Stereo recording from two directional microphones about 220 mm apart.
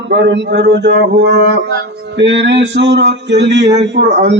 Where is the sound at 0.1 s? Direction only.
50° right (ahead or behind).